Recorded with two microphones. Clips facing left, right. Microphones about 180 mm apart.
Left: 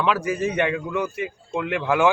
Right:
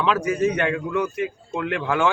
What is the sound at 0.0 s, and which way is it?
Speech, 5° left (ahead or behind).